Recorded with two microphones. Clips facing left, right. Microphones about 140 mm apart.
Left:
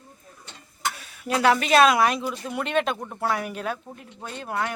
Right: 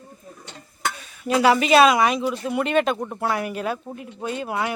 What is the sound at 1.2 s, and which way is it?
Speech, 5° right (ahead or behind).